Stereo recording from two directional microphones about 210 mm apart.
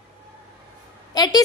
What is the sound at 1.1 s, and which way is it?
Speech, 20° left (ahead or behind).